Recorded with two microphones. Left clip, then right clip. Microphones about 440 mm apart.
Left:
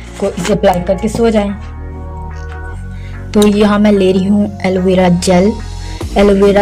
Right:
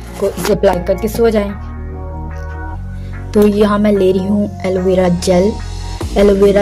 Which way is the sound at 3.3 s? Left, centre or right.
Right.